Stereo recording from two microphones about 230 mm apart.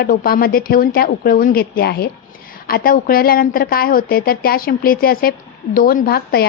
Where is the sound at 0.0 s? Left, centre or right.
Left.